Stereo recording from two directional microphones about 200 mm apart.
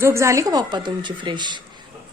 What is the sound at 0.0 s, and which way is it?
A woman's voice, 15° right (ahead or behind).